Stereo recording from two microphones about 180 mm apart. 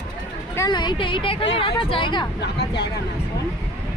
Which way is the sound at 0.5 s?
20° left (ahead or behind).